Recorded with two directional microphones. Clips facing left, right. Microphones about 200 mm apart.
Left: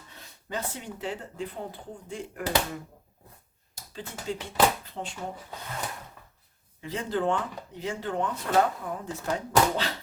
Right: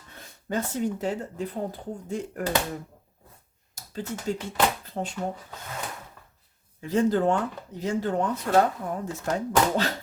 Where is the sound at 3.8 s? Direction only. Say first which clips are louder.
Right 6 dB; 45° right (ahead or behind).